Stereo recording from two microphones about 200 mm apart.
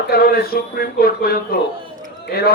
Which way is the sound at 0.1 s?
50° left (ahead or behind).